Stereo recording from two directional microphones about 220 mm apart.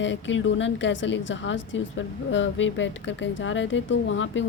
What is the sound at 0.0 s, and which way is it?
A woman's voice, 55° left (ahead or behind).